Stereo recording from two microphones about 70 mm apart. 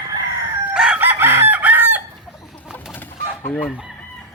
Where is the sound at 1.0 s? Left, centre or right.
Right.